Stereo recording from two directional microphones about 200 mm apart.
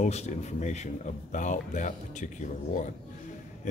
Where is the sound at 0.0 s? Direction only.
35° left (ahead or behind).